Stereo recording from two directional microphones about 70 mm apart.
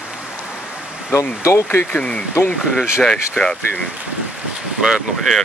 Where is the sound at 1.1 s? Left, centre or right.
Left.